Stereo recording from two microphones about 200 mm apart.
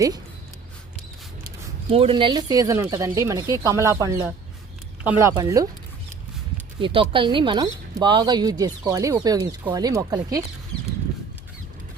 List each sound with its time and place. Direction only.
1.9 s speech: 30° right (ahead or behind)
6.7 s speech: 25° right (ahead or behind)